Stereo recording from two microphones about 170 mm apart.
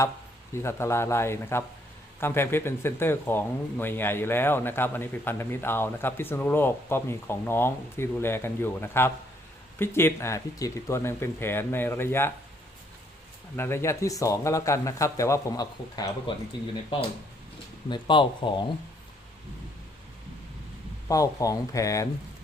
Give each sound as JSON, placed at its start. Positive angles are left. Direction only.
{"t": 0.5, "sound": "speech", "side_deg": 15}
{"t": 13.6, "sound": "speech", "side_deg": 15}
{"t": 17.8, "sound": "speech", "side_deg": 30}
{"t": 21.1, "sound": "speech", "side_deg": 20}